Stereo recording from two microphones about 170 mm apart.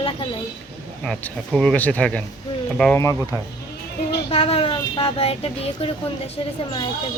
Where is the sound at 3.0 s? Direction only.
20° left (ahead or behind).